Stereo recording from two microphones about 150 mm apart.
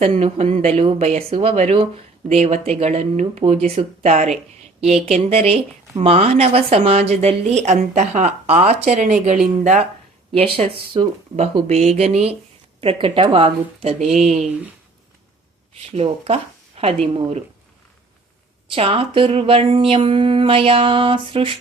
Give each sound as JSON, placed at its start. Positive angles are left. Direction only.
{"t": 0.0, "sound": "a woman's voice", "side_deg": -40}
{"t": 10.3, "sound": "a woman's voice", "side_deg": -40}
{"t": 15.8, "sound": "speech", "side_deg": -40}
{"t": 18.7, "sound": "speech", "side_deg": -40}